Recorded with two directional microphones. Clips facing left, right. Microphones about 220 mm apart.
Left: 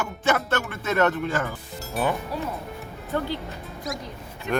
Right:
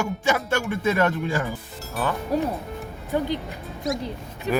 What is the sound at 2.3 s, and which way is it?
Speech, 45° right (ahead or behind).